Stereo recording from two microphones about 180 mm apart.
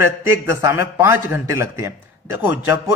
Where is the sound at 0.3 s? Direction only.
15° right (ahead or behind).